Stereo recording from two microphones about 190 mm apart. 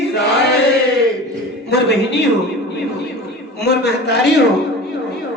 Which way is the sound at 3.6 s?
60° left (ahead or behind).